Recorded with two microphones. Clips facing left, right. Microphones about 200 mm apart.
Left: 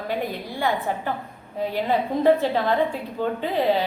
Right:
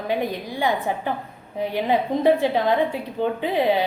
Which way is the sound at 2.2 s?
15° right (ahead or behind).